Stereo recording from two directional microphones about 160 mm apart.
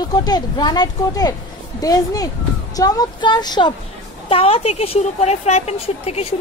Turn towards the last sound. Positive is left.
turn(degrees=40)  # may be behind; listen again after turning